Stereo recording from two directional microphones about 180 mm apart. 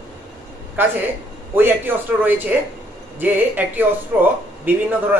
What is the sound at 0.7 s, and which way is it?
Speech, 10° right (ahead or behind).